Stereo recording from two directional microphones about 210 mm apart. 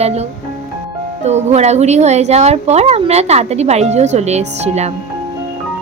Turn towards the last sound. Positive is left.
turn(degrees=-30)  # may be behind; listen again after turning